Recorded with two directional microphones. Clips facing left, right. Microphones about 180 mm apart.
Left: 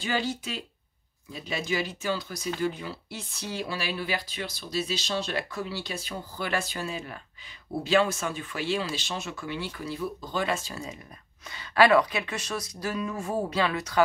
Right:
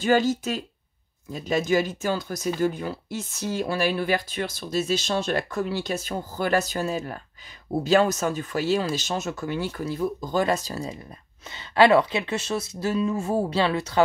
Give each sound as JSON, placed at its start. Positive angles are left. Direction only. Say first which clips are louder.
{"t": 0.0, "sound": "speech", "louder": "right 9 dB", "side_deg": -45}
{"t": 11.5, "sound": "speech", "louder": "right 3 dB", "side_deg": -25}